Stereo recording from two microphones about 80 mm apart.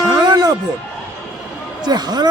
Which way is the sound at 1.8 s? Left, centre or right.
Right.